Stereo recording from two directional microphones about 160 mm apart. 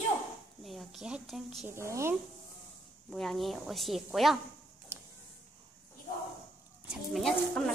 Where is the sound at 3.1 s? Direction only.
Centre (ahead or behind).